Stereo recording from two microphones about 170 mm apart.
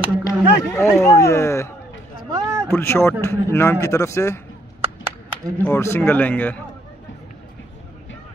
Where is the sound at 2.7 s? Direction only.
15° left (ahead or behind).